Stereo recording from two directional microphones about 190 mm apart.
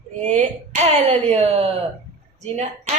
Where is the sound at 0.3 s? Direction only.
40° right (ahead or behind).